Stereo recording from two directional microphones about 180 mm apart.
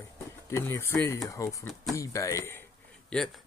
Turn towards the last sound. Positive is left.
turn(degrees=5)  # may be behind; listen again after turning